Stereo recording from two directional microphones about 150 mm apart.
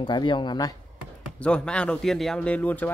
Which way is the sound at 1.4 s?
5° left (ahead or behind).